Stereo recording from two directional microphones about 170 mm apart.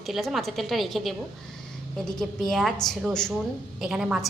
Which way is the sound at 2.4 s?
Centre (ahead or behind).